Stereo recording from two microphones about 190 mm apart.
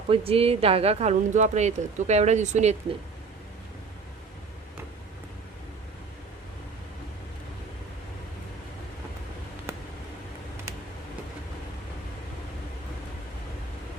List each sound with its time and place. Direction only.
0.1 s speech: 30° right (ahead or behind)